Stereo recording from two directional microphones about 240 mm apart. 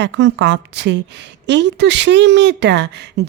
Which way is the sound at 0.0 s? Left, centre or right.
Right.